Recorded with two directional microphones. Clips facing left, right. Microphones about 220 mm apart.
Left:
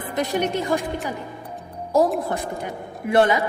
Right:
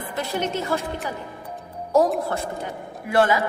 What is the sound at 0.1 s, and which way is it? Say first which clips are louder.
Speech: left 4 dB; 15° left (ahead or behind).